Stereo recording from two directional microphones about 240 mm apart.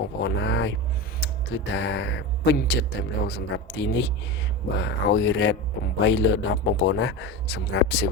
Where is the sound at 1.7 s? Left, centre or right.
Left.